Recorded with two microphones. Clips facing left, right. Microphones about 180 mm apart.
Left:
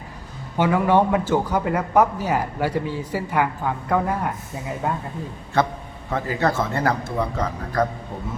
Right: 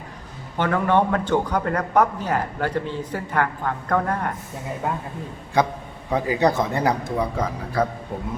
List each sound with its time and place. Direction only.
0.5 s a man's voice: 10° left (ahead or behind)
5.5 s speech: 15° right (ahead or behind)